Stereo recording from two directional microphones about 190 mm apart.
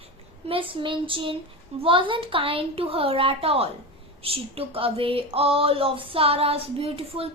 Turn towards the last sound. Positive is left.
turn(degrees=-30)  # may be behind; listen again after turning